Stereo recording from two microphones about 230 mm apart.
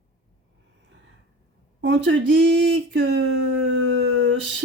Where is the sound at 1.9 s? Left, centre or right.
Right.